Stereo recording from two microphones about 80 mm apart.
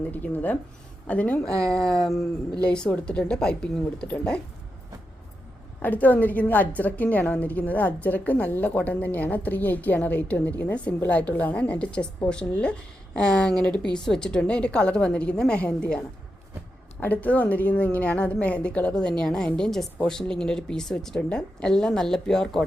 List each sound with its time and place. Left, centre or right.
0.1 s a woman's voice: left
5.8 s a woman's voice: left
17.0 s a woman's voice: centre